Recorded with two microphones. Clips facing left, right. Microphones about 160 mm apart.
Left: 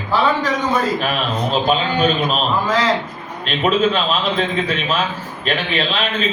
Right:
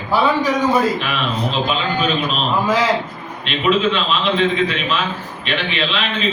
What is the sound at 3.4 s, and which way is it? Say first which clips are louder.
A man's voice: even; 40° left (ahead or behind).